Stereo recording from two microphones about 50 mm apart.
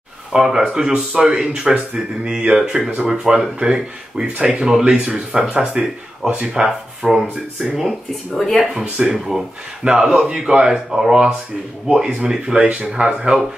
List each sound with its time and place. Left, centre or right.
0.3 s speech: centre
5.7 s speech: centre
8.4 s speech: centre